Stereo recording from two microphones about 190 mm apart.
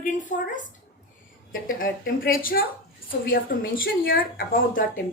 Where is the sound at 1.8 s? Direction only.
50° left (ahead or behind).